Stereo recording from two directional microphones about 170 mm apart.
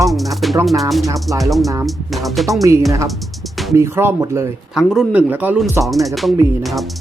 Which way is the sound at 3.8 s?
15° right (ahead or behind).